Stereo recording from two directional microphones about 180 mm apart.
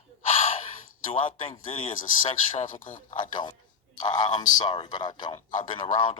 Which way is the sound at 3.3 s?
25° left (ahead or behind).